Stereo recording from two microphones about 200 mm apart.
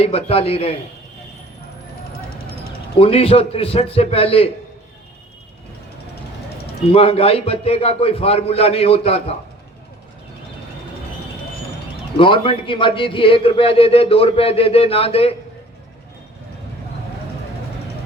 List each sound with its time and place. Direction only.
0.0 s a man's voice: 30° left (ahead or behind)
3.0 s a man's voice: 30° left (ahead or behind)
6.8 s a man's voice: 30° left (ahead or behind)
12.1 s a man's voice: 25° left (ahead or behind)